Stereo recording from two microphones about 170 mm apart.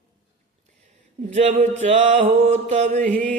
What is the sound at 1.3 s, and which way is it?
Mantra, 45° right (ahead or behind).